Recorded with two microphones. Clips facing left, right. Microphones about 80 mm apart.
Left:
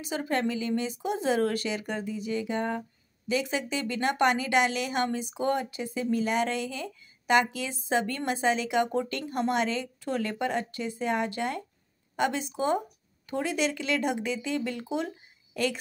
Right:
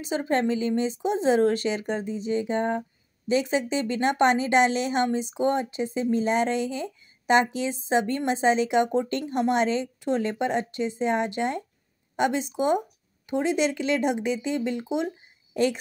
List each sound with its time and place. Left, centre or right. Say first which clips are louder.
0.0 s speech: right 4 dB; right